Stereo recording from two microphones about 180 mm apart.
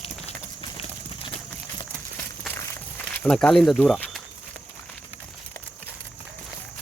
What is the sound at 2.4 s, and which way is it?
Walk, 10° left (ahead or behind).